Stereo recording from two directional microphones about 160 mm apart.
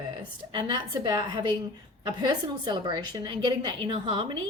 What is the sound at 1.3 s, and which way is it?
A woman's voice, 30° right (ahead or behind).